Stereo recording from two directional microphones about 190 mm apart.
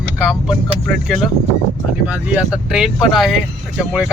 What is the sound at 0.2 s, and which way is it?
Speech, centre (ahead or behind).